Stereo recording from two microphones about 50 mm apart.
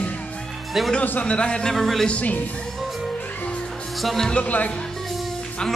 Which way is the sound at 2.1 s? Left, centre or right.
Left.